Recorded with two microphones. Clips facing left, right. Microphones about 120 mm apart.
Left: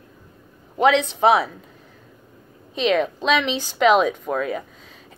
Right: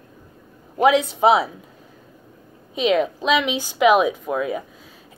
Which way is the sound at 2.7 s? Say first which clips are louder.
Right 1 dB; 10° right (ahead or behind).